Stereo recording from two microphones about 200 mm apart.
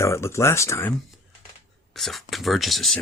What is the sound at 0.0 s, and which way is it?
Speech, 15° left (ahead or behind).